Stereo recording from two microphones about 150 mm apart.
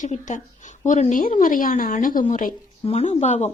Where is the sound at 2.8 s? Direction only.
45° left (ahead or behind).